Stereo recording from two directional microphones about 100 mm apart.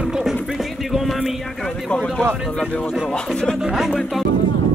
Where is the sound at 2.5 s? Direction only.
15° left (ahead or behind).